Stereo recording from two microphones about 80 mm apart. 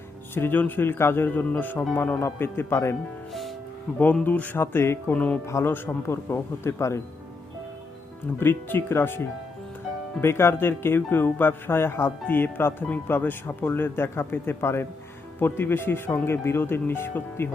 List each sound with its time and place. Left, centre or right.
0.3 s speech: left
3.9 s speech: centre
5.1 s speech: centre
5.5 s speech: left
5.7 s speech: left
8.4 s speech: left